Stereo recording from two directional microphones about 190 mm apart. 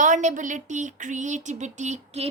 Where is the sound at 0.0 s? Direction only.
40° right (ahead or behind).